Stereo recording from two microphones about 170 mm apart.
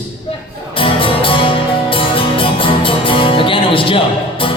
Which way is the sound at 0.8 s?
30° left (ahead or behind).